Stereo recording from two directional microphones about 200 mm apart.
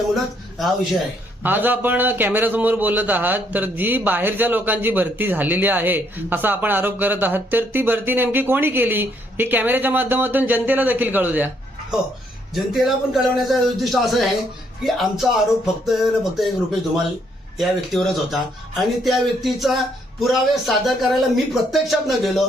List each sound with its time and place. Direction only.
1.4 s a man's voice: 10° right (ahead or behind)
17.6 s speech: centre (ahead or behind)